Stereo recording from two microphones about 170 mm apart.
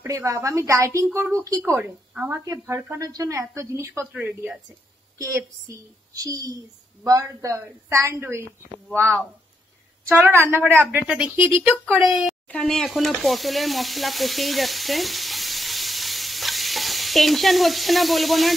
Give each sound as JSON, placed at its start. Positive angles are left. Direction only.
{"t": 0.0, "sound": "speech", "side_deg": -15}
{"t": 6.1, "sound": "speech", "side_deg": -20}
{"t": 10.0, "sound": "speech", "side_deg": -15}
{"t": 11.9, "sound": "speech", "side_deg": 0}